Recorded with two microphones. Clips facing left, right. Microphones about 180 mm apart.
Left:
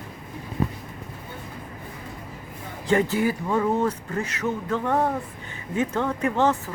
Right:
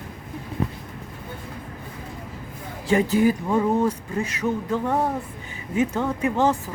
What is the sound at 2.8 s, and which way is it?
Speech, 15° right (ahead or behind).